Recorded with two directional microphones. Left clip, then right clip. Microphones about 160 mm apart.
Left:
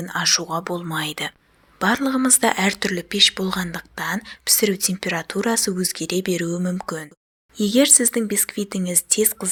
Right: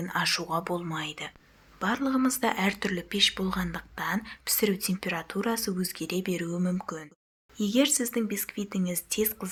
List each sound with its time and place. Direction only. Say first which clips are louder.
0.0 s speech: left 7 dB; 25° left (ahead or behind)
0.9 s speech: left 9 dB; 40° left (ahead or behind)